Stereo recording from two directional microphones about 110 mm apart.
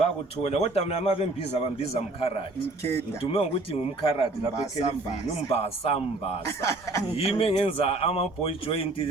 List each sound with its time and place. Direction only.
0.0 s a man's voice: 70° left (ahead or behind)
3.3 s speech: 60° left (ahead or behind)
5.5 s speech: 65° left (ahead or behind)
6.6 s speech: 30° left (ahead or behind)
7.2 s speech: 60° left (ahead or behind)